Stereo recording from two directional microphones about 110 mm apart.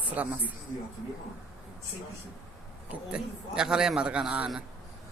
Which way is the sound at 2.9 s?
10° right (ahead or behind).